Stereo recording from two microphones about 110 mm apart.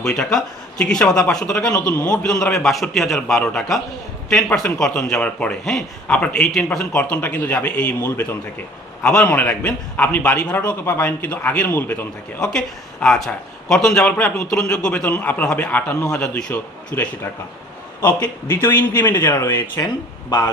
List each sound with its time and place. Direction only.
0.0 s a man's voice: 5° left (ahead or behind)
12.4 s a man's voice: 5° left (ahead or behind); by 19.8 s 25° left (ahead or behind)